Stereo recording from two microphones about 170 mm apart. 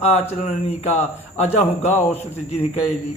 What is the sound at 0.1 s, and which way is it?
Speech, 40° left (ahead or behind).